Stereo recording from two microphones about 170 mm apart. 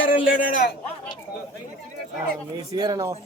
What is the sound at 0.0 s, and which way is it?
Speech, 55° left (ahead or behind).